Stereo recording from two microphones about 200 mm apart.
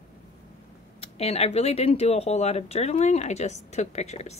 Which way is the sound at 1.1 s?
30° left (ahead or behind).